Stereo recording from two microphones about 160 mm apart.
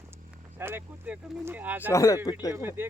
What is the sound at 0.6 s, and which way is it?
Speech, 15° right (ahead or behind).